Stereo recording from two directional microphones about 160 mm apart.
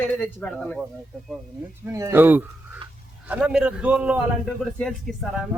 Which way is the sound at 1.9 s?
20° right (ahead or behind).